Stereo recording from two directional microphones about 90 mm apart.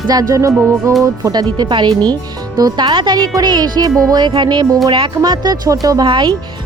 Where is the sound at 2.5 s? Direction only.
50° right (ahead or behind).